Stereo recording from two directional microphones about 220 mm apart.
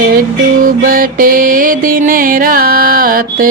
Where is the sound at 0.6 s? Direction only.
40° right (ahead or behind).